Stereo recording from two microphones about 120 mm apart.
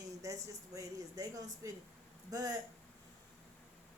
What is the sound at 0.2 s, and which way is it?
A woman's voice, 25° right (ahead or behind).